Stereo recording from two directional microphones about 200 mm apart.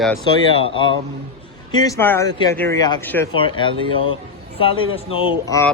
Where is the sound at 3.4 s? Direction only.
25° left (ahead or behind).